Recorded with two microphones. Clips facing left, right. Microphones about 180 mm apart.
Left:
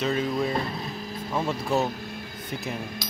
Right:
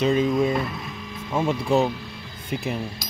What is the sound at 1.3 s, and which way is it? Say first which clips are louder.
Speech: right 5 dB; 10° right (ahead or behind).